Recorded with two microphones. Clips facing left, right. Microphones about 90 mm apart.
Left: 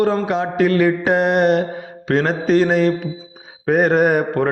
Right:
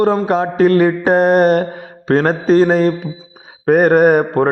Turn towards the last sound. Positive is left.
turn(degrees=-40)  # may be behind; listen again after turning